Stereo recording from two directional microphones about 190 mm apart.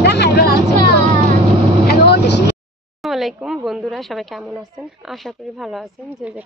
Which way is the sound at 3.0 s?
Centre (ahead or behind).